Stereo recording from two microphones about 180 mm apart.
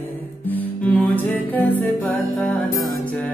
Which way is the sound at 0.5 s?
10° left (ahead or behind).